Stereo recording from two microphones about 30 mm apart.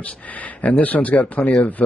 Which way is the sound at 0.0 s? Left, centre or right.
Left.